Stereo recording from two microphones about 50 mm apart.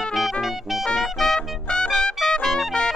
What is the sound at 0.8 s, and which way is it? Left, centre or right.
Music, centre.